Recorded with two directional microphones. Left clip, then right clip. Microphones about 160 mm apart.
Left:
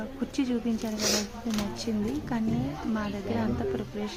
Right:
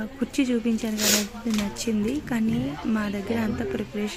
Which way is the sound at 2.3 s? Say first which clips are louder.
Right 4 dB; 20° right (ahead or behind).